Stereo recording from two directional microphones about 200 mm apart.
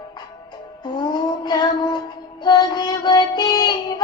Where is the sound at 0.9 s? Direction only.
20° left (ahead or behind).